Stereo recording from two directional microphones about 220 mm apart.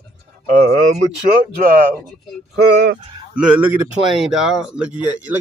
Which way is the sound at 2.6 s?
50° right (ahead or behind).